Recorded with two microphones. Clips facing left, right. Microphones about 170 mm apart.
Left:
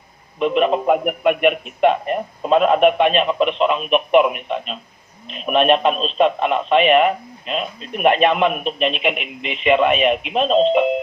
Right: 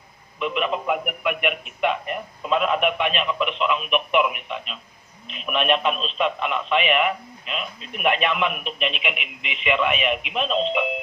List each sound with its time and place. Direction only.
0.3 s speech: 40° left (ahead or behind)